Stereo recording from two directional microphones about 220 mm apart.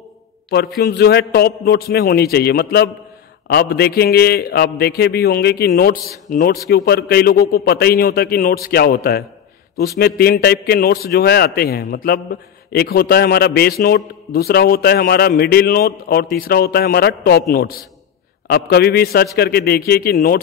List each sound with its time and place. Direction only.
0.8 s a man's voice: 45° left (ahead or behind)